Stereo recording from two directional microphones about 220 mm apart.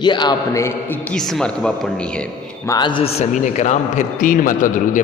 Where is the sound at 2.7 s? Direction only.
20° left (ahead or behind).